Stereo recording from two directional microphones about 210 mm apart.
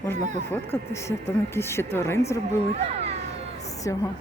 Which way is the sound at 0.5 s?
10° left (ahead or behind).